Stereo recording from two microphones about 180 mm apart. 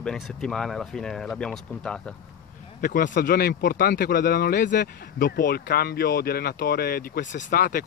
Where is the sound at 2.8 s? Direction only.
50° left (ahead or behind).